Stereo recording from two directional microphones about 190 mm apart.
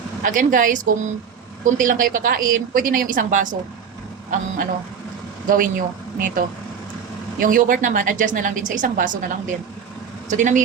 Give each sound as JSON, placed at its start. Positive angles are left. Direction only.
{"t": 0.2, "sound": "a woman's voice", "side_deg": -45}
{"t": 10.2, "sound": "speech", "side_deg": -40}